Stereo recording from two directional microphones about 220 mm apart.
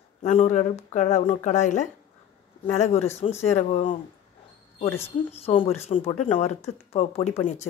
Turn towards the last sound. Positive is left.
turn(degrees=30)  # may be behind; listen again after turning